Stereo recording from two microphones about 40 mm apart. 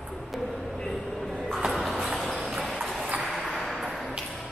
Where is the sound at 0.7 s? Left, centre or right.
Centre.